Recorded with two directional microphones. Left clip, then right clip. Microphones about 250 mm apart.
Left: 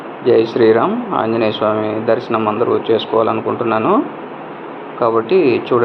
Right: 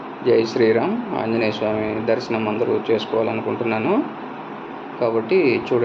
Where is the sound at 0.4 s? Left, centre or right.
Centre.